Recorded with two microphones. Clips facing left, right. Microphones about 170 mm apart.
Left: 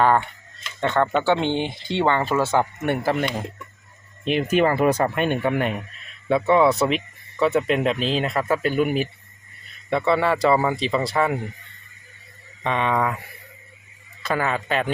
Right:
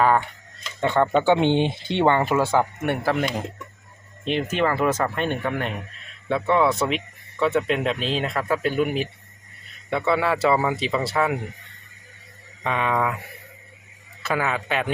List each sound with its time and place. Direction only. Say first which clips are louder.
0.0 s speech: left 1 dB; 5° right (ahead or behind)
2.5 s speech: even; centre (ahead or behind)
12.6 s speech: left 1 dB; 5° right (ahead or behind)
14.2 s speech: left 1 dB; 5° right (ahead or behind)